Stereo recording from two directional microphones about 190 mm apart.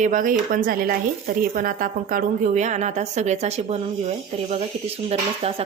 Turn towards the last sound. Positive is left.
turn(degrees=-30)  # may be behind; listen again after turning